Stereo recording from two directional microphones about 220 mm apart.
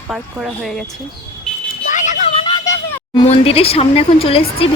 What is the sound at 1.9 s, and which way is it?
Vehicle, 35° left (ahead or behind).